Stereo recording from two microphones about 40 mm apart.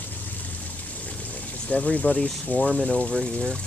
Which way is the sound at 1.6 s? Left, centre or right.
Left.